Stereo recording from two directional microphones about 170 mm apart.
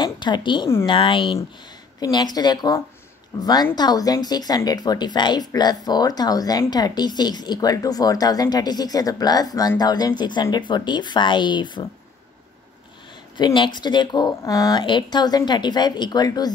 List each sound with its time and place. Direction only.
0.0 s a woman's voice: 25° left (ahead or behind)
13.4 s a woman's voice: 25° left (ahead or behind)